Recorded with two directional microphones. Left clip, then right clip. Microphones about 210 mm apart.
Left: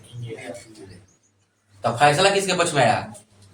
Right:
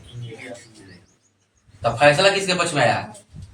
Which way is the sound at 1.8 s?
25° left (ahead or behind).